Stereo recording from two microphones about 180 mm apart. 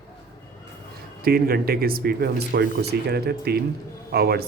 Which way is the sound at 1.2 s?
55° right (ahead or behind).